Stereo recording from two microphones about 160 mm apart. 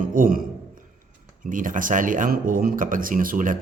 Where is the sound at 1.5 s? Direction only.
55° right (ahead or behind).